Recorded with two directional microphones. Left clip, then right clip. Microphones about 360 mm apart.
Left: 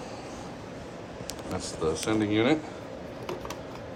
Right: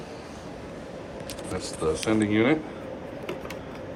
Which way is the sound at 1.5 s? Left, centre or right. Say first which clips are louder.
Right 2 dB; centre.